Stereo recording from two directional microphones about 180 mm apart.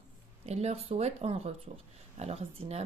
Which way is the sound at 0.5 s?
35° right (ahead or behind).